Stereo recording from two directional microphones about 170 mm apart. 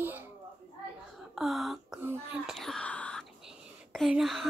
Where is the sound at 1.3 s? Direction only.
Centre (ahead or behind).